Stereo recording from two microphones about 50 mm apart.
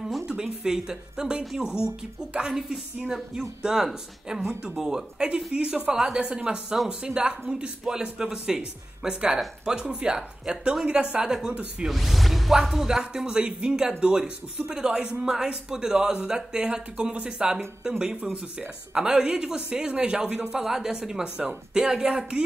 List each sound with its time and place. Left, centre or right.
0.3 s speech: centre
3.3 s speech: centre
4.4 s speech: right
4.7 s speech: centre
11.9 s speech: centre
18.2 s speech: right